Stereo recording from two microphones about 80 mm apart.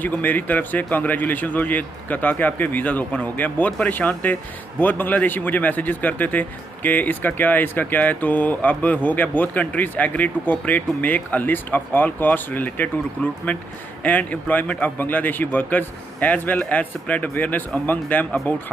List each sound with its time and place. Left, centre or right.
0.0 s a man's voice: left